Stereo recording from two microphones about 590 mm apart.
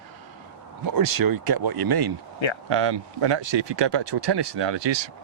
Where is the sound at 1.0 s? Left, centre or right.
Right.